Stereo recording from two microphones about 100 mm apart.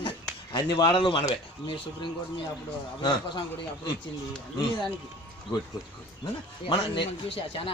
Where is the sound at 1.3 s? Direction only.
55° left (ahead or behind).